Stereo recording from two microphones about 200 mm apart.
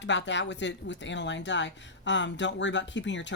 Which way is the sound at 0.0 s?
65° left (ahead or behind).